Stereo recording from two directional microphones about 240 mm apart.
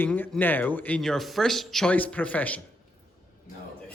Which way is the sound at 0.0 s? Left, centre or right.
Centre.